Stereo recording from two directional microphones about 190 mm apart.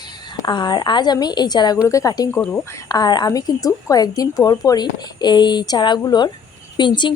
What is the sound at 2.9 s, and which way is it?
Speech, 20° left (ahead or behind).